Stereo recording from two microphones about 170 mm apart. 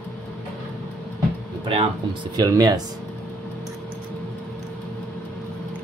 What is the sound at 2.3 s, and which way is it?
Speech, 20° right (ahead or behind).